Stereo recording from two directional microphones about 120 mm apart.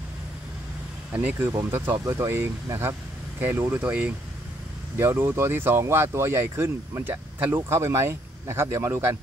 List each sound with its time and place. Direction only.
1.1 s speech: 15° right (ahead or behind)